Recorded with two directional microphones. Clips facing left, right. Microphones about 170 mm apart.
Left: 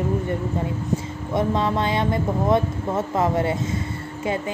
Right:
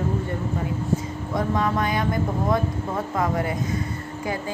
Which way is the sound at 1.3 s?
25° left (ahead or behind).